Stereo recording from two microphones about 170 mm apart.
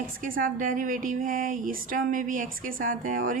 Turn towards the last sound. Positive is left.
turn(degrees=-50)  # may be behind; listen again after turning